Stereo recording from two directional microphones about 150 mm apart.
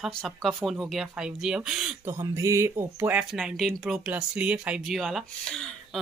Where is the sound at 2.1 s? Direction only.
20° right (ahead or behind); by 6.0 s centre (ahead or behind).